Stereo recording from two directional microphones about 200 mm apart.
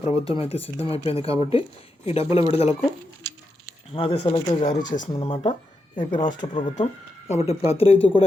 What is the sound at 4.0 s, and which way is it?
A man's voice, 30° left (ahead or behind).